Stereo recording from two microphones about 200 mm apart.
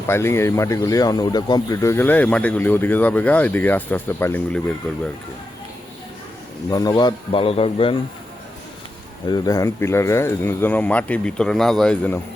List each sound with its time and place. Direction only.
0.1 s speech: 15° left (ahead or behind)
6.7 s a man's voice: 20° left (ahead or behind)
9.3 s speech: 20° left (ahead or behind)